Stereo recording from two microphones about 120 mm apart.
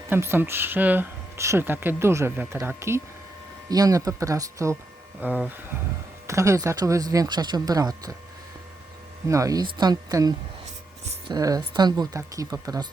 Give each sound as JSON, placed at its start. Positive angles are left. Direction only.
{"t": 0.1, "sound": "speech", "side_deg": -20}
{"t": 5.2, "sound": "speech", "side_deg": -15}
{"t": 6.2, "sound": "speech", "side_deg": -25}
{"t": 9.2, "sound": "speech", "side_deg": -25}